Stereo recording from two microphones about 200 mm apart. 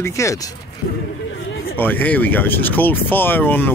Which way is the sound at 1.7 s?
10° left (ahead or behind).